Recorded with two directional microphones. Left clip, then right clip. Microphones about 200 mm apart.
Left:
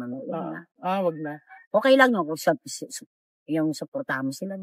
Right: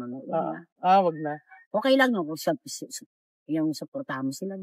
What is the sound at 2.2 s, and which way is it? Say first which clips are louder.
Speech: left 4 dB; centre (ahead or behind).